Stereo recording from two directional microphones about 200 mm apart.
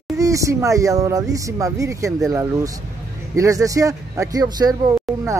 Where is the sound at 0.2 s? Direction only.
15° right (ahead or behind).